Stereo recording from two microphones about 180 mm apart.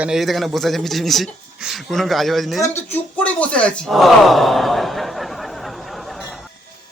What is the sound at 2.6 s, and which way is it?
Gasp, 10° left (ahead or behind).